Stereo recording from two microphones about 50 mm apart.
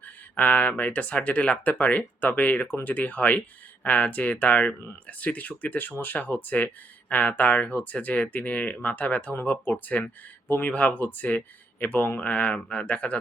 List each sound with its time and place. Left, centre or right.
0.0 s speech: left
12.8 s speech: left